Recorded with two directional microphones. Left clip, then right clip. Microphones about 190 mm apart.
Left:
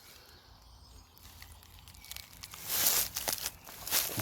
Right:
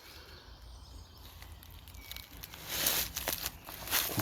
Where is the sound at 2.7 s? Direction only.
30° left (ahead or behind).